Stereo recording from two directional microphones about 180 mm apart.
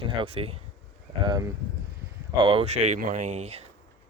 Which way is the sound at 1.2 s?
20° right (ahead or behind).